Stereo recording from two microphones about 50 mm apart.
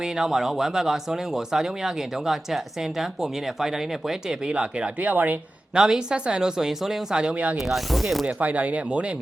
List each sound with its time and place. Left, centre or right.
0.0 s speech: centre
4.9 s speech: right
5.7 s speech: centre
7.7 s speech: centre
8.4 s speech: right